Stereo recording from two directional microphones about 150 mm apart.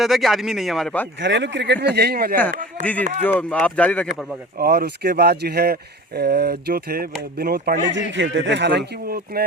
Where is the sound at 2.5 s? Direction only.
60° right (ahead or behind).